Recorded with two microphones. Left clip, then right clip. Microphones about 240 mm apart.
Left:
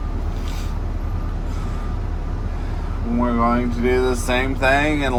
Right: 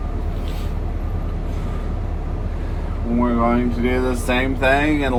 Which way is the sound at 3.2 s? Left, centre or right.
Left.